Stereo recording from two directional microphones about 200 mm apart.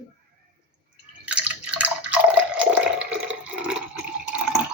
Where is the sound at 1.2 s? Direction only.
5° right (ahead or behind).